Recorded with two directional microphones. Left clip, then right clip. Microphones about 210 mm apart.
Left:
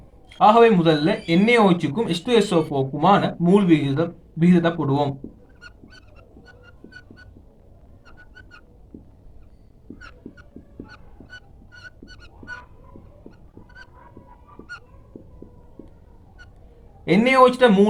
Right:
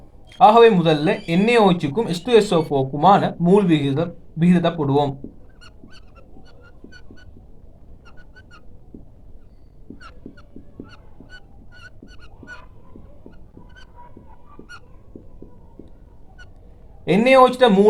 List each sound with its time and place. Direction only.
0.3 s a man's voice: 30° right (ahead or behind)
17.3 s a man's voice: 35° right (ahead or behind)